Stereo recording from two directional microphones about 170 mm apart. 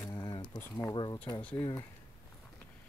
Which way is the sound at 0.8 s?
25° left (ahead or behind).